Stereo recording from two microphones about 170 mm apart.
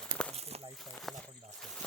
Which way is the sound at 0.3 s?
40° right (ahead or behind).